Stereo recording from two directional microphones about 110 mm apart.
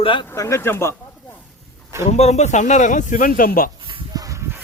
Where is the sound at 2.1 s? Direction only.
85° left.